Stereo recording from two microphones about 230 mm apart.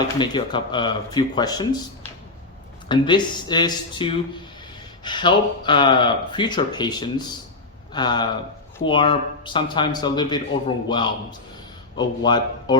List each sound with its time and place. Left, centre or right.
0.0 s a man's voice: centre
2.9 s a man's voice: centre